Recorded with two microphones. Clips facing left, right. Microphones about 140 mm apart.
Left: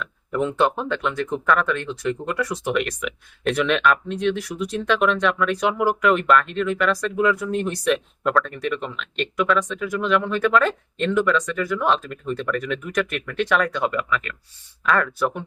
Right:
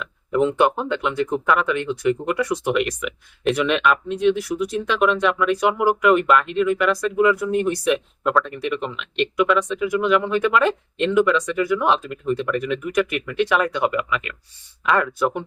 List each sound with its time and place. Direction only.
0.3 s speech: 15° right (ahead or behind)